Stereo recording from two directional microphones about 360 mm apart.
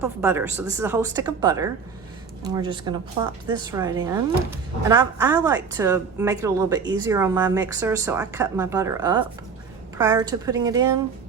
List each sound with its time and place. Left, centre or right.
0.0 s a woman's voice: centre